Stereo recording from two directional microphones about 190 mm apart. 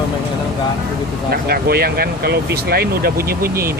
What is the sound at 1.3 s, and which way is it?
Speech, 55° right (ahead or behind).